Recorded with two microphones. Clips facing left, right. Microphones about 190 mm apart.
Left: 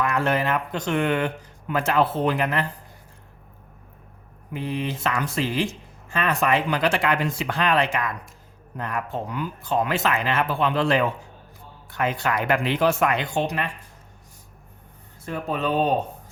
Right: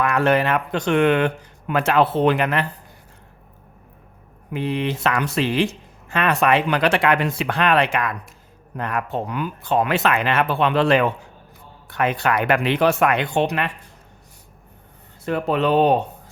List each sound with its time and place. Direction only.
0.0 s speech: 65° right (ahead or behind)
4.5 s speech: 70° right (ahead or behind)
15.2 s speech: 70° right (ahead or behind)